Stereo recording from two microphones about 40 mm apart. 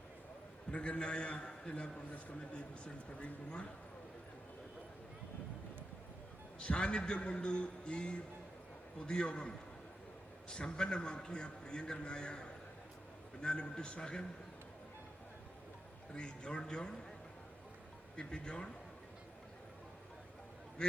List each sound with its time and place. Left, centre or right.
0.7 s a man's voice: left
6.6 s a man's voice: left
10.5 s a man's voice: left
16.1 s a man's voice: left
18.2 s a man's voice: left